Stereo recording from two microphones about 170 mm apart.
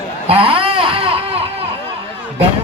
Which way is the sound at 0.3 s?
35° right (ahead or behind).